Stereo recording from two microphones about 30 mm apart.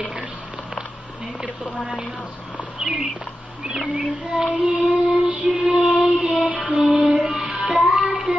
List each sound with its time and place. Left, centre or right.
3.9 s child singing: right
4.6 s music: right